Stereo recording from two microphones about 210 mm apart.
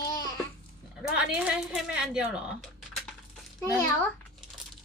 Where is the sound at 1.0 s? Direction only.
5° right (ahead or behind).